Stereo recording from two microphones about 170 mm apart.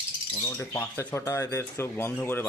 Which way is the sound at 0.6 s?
15° left (ahead or behind).